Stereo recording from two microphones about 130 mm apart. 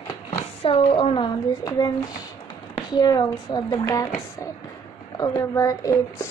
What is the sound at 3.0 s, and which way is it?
A woman's voice, 30° left (ahead or behind).